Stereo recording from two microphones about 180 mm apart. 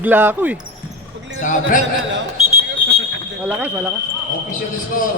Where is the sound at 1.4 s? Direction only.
45° left (ahead or behind).